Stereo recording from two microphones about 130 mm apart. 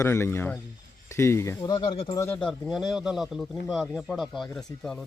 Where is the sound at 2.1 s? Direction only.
15° left (ahead or behind).